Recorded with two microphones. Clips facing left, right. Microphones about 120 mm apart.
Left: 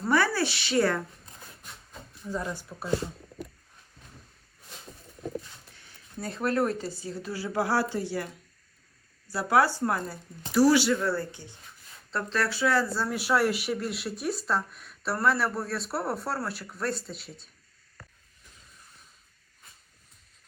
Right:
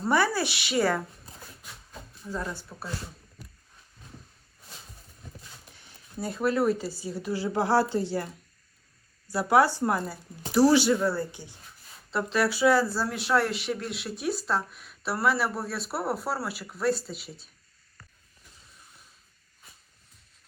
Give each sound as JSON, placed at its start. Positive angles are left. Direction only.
{"t": 0.0, "sound": "speech", "side_deg": -15}
{"t": 1.4, "sound": "a sound", "side_deg": -5}
{"t": 2.3, "sound": "speech", "side_deg": 15}
{"t": 6.1, "sound": "speech", "side_deg": -10}
{"t": 9.3, "sound": "speech", "side_deg": -15}